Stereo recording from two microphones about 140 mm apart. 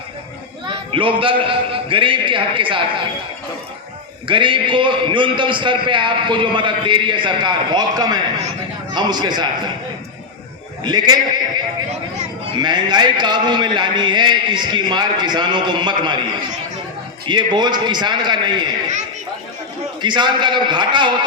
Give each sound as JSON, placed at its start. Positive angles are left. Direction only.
{"t": 0.7, "sound": "a man's voice", "side_deg": -40}
{"t": 4.3, "sound": "a man's voice", "side_deg": -35}
{"t": 10.8, "sound": "a man's voice", "side_deg": -30}
{"t": 17.2, "sound": "a man's voice", "side_deg": -30}
{"t": 20.0, "sound": "a man's voice", "side_deg": -35}